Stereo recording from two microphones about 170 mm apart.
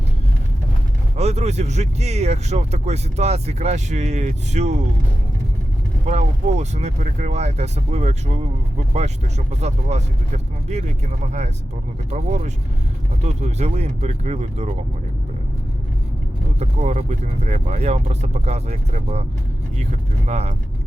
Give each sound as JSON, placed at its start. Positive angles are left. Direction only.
{"t": 1.1, "sound": "speech", "side_deg": -40}
{"t": 6.1, "sound": "speech", "side_deg": -40}
{"t": 9.5, "sound": "speech", "side_deg": -40}
{"t": 16.6, "sound": "speech", "side_deg": -40}
{"t": 20.2, "sound": "speech", "side_deg": -40}